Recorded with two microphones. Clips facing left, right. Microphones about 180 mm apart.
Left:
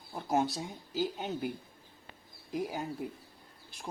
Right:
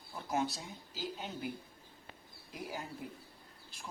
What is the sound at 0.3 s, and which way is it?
Speech, 40° left (ahead or behind).